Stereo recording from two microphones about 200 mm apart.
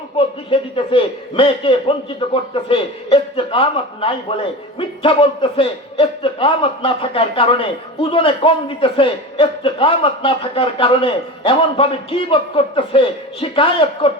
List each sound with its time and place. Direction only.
0.5 s a man's voice: 25° left (ahead or behind)